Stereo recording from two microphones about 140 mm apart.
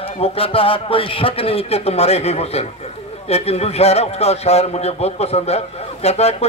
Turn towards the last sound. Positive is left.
turn(degrees=50)  # may be behind; listen again after turning